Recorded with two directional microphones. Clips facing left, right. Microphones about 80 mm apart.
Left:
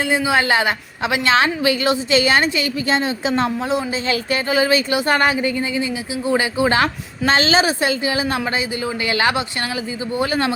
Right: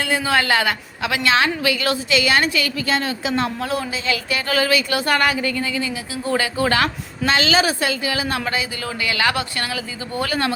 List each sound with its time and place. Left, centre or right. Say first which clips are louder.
0.0 s speech: left 2 dB; centre